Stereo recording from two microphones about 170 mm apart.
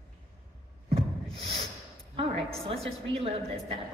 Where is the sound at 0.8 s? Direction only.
35° right (ahead or behind).